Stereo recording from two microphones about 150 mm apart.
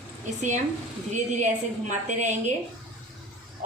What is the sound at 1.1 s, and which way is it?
A woman's voice, 55° right (ahead or behind).